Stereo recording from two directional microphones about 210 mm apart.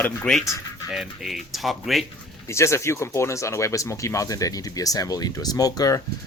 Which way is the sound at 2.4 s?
15° left (ahead or behind).